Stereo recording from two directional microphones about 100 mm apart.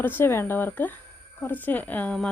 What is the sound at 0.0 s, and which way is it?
Speech, 20° left (ahead or behind).